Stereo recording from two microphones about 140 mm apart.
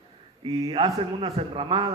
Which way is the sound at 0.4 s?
35° right (ahead or behind).